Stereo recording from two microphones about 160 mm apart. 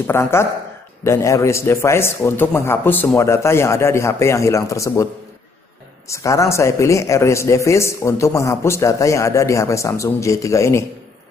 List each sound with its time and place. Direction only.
0.0 s a man's voice: 15° left (ahead or behind)
6.0 s a man's voice: 20° left (ahead or behind)